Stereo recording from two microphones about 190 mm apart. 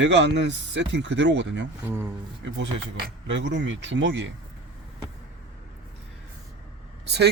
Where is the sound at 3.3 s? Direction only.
70° right (ahead or behind).